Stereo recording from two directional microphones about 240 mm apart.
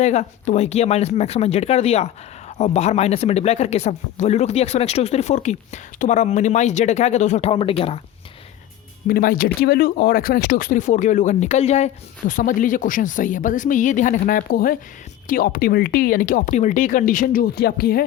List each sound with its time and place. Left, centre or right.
0.0 s speech: left
9.0 s speech: left